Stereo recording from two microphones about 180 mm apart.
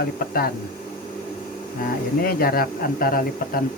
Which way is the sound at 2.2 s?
55° left (ahead or behind).